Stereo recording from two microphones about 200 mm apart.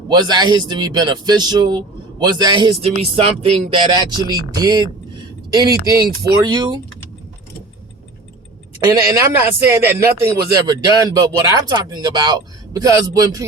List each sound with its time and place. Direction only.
0.1 s speech: 20° right (ahead or behind)
8.9 s a man's voice: 15° right (ahead or behind)